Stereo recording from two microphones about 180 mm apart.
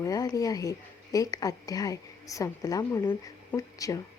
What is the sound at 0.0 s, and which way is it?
Speech, 20° left (ahead or behind).